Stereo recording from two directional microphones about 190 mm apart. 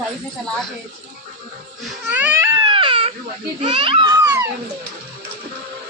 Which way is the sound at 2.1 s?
10° right (ahead or behind).